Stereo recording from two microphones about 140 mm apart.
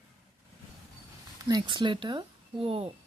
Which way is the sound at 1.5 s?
30° right (ahead or behind).